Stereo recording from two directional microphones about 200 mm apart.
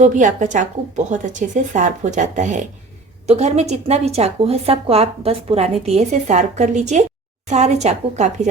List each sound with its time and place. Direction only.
0.0 s a woman's voice: 40° right (ahead or behind)